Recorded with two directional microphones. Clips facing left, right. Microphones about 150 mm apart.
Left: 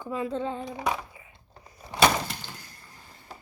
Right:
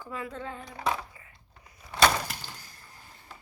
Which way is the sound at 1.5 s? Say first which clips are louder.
Left 6 dB; 35° left (ahead or behind).